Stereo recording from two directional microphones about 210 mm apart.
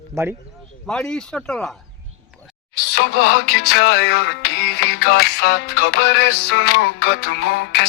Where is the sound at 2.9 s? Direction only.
50° left (ahead or behind).